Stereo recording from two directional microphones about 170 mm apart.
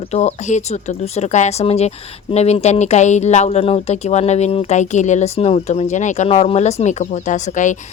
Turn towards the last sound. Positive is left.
turn(degrees=45)  # may be behind; listen again after turning